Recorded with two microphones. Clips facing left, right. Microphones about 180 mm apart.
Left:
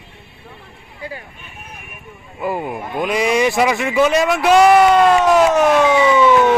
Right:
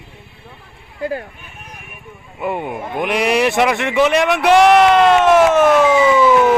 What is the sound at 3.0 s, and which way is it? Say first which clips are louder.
Speech: even; 70° right (ahead or behind).